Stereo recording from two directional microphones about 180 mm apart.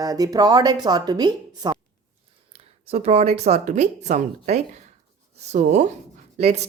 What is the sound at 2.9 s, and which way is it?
Speech, 35° right (ahead or behind).